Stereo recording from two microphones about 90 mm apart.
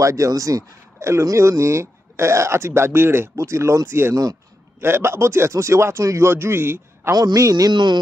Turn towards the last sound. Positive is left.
turn(degrees=-55)  # may be behind; listen again after turning